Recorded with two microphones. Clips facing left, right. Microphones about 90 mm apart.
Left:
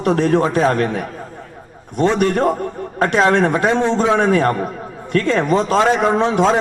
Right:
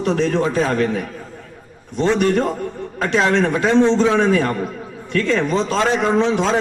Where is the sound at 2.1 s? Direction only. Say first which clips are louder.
Left 2 dB; 50° left (ahead or behind).